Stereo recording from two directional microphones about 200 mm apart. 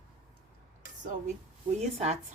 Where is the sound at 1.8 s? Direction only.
30° right (ahead or behind).